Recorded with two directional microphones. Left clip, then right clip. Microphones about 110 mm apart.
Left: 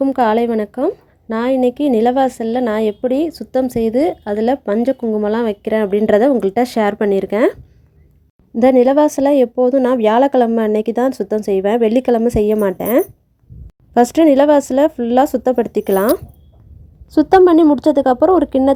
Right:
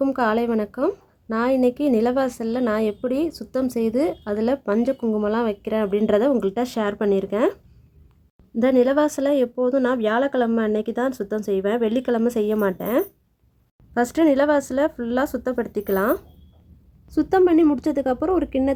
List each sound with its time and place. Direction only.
0.2 s a woman's voice: 30° left (ahead or behind); by 7.6 s 45° left (ahead or behind)
8.5 s speech: 35° left (ahead or behind)